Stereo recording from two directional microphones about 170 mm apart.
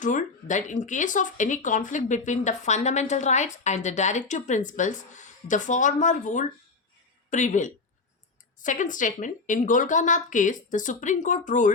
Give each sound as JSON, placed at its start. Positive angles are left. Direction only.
{"t": 0.0, "sound": "speech", "side_deg": 45}